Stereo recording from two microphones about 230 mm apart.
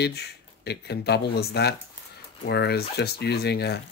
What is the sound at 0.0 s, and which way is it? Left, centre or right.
Speech, left.